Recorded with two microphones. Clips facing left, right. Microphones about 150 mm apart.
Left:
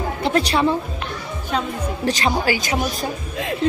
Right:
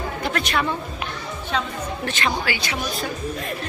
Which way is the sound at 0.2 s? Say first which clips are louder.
Left 7 dB; 30° left (ahead or behind).